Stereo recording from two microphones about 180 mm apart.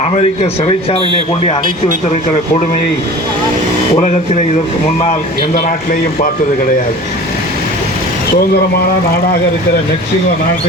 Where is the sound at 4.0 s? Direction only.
40° left (ahead or behind).